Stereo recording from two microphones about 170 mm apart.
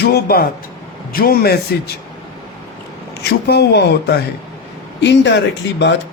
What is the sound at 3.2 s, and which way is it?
Speech, 70° left (ahead or behind).